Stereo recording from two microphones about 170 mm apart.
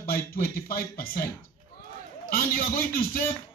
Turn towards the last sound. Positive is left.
turn(degrees=55)  # may be behind; listen again after turning